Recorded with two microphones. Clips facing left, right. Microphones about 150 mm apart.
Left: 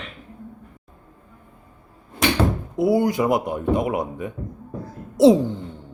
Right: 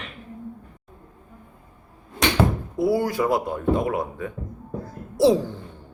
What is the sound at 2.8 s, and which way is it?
Speech, 20° left (ahead or behind).